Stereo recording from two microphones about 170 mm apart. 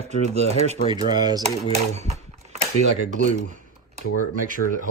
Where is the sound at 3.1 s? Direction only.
50° right (ahead or behind).